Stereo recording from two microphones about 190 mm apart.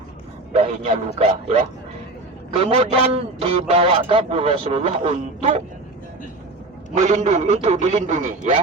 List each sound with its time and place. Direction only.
0.5 s a man's voice: 35° right (ahead or behind)
7.0 s a man's voice: 35° right (ahead or behind)